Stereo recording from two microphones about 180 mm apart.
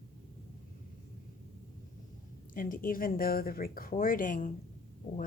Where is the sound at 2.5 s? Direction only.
50° left (ahead or behind).